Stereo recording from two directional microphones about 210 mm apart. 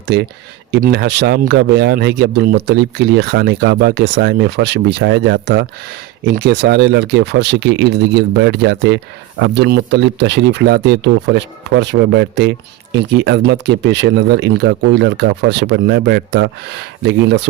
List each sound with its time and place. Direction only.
0.0 s speech: 50° right (ahead or behind)